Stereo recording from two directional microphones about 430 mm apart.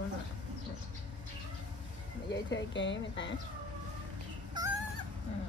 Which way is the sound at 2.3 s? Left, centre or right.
Left.